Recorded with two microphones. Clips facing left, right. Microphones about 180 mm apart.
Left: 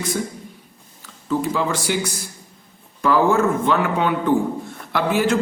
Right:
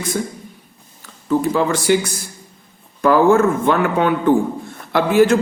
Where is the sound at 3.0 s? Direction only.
50° right (ahead or behind).